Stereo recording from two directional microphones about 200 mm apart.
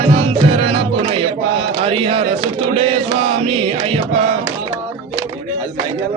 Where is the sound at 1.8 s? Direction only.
25° right (ahead or behind).